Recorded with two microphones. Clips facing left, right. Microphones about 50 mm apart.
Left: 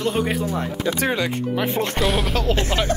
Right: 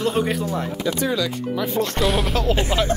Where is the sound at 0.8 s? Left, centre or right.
Left.